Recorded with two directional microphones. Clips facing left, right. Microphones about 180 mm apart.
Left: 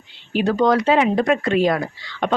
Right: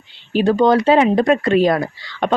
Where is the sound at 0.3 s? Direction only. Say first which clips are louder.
Right 3 dB; 25° right (ahead or behind).